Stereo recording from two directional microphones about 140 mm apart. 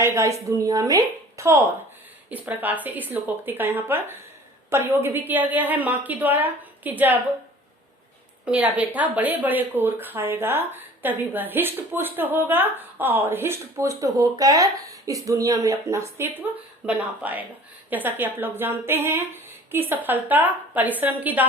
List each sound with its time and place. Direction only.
0.0 s a woman's voice: 20° right (ahead or behind)
8.4 s speech: 10° right (ahead or behind)